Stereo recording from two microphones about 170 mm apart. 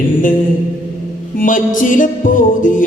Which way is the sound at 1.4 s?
50° left (ahead or behind).